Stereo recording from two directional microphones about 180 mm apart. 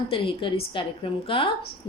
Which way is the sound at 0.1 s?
30° left (ahead or behind).